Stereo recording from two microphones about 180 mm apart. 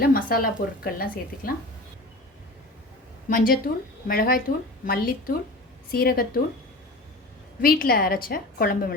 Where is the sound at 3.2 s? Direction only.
50° left (ahead or behind).